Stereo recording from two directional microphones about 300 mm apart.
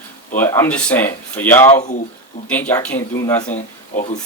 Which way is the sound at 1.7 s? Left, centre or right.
Left.